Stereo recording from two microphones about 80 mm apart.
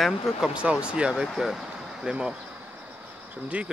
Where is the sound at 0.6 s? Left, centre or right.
Centre.